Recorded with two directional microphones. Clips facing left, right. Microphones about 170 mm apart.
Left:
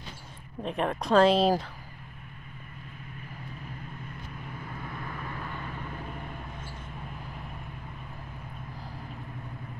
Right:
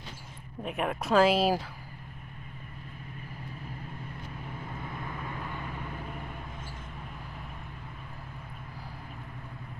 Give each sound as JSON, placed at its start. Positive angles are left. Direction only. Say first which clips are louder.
{"t": 0.7, "sound": "speech", "louder": "left 2 dB", "side_deg": -5}
{"t": 4.8, "sound": "vehicle", "louder": "left 1 dB", "side_deg": -20}